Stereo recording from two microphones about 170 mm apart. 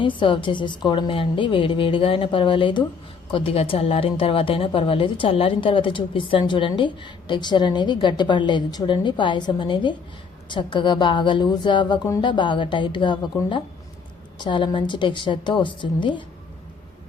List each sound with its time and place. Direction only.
0.2 s a woman's voice: 30° left (ahead or behind)